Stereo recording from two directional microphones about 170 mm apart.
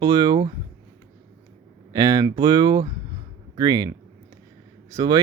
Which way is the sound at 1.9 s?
25° right (ahead or behind).